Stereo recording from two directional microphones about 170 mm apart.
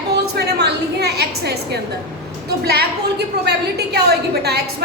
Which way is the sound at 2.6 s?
70° right (ahead or behind).